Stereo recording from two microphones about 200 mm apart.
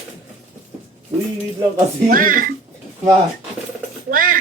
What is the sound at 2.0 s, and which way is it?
Speech, 45° right (ahead or behind).